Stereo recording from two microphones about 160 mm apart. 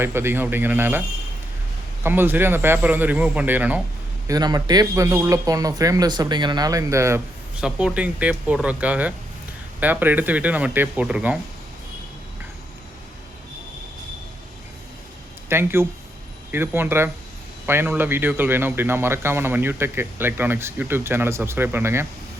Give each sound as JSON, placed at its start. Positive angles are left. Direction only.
{"t": 0.0, "sound": "speech", "side_deg": -15}
{"t": 2.0, "sound": "speech", "side_deg": -15}
{"t": 4.3, "sound": "speech", "side_deg": -25}
{"t": 7.6, "sound": "speech", "side_deg": -5}
{"t": 15.4, "sound": "speech", "side_deg": -15}